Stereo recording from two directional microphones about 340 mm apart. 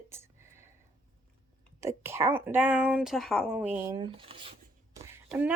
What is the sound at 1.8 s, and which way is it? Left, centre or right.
Speech, centre.